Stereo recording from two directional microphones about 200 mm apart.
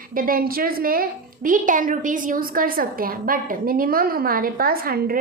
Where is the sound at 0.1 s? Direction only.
45° right (ahead or behind).